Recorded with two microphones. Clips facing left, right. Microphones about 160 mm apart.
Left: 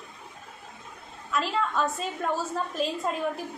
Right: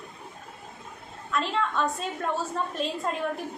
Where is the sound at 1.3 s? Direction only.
5° left (ahead or behind).